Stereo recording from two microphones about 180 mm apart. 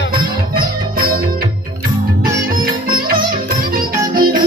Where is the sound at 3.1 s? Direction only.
55° right (ahead or behind).